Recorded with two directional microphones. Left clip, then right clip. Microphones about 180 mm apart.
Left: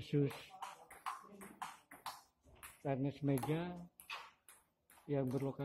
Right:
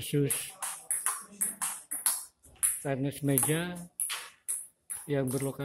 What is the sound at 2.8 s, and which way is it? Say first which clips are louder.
Speech: right 6 dB; 10° right (ahead or behind).